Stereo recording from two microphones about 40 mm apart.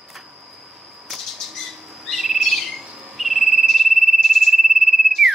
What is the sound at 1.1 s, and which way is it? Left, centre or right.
Bird, centre.